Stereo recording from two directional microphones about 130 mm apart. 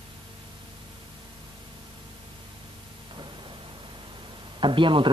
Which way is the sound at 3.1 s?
40° right (ahead or behind).